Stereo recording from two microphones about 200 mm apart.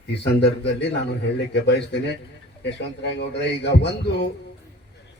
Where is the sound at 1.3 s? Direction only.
60° left (ahead or behind).